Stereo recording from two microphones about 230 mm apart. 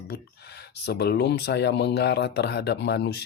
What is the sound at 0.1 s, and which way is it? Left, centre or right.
Speech, left.